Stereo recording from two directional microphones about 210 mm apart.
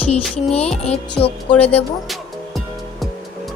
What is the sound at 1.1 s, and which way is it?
Speech, 25° left (ahead or behind).